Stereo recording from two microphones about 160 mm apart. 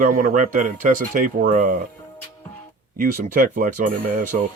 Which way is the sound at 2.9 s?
55° right (ahead or behind).